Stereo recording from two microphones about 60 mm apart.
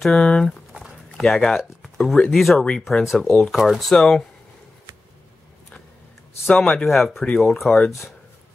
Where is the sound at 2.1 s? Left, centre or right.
Centre.